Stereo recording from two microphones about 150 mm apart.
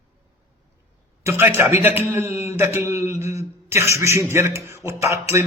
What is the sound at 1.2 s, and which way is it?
A man's voice, 20° right (ahead or behind).